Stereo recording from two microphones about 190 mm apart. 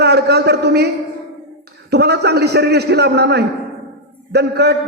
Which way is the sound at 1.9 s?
60° right (ahead or behind).